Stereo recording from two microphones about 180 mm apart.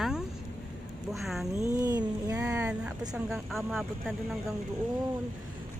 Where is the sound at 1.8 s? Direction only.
20° right (ahead or behind).